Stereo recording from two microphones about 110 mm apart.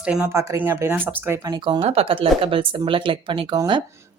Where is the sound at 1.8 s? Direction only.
65° right (ahead or behind).